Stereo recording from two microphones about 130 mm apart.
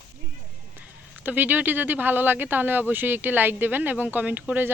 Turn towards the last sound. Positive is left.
turn(degrees=-15)  # may be behind; listen again after turning